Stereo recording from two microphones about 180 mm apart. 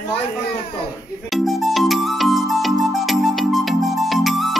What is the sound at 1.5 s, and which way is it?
Music, centre (ahead or behind).